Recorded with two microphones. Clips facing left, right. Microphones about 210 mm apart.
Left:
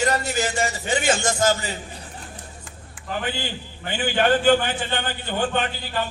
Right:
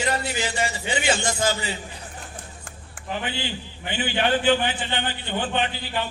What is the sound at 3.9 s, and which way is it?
A man's voice, 45° left (ahead or behind).